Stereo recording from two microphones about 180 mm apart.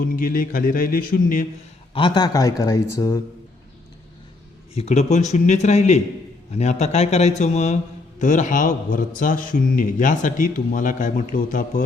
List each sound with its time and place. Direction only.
0.0 s a man's voice: 50° left (ahead or behind)
1.9 s speech: 25° left (ahead or behind)
4.7 s a man's voice: 35° left (ahead or behind)